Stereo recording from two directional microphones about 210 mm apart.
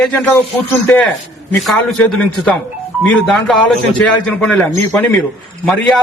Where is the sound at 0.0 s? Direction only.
5° left (ahead or behind).